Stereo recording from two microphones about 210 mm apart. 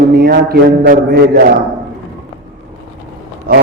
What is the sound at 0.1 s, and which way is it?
A man's voice, 50° right (ahead or behind).